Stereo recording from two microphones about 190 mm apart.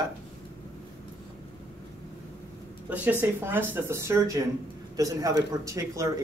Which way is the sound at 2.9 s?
10° right (ahead or behind).